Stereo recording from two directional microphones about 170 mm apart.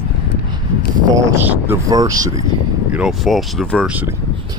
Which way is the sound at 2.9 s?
5° right (ahead or behind).